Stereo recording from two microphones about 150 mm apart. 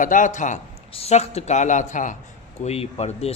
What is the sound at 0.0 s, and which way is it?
Speech, 60° left (ahead or behind).